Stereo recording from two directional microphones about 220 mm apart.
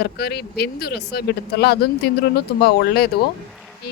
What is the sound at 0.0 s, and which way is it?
Speech, 45° left (ahead or behind).